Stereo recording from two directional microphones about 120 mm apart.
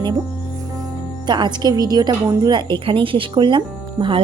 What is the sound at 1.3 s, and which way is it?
A woman's voice, 35° right (ahead or behind).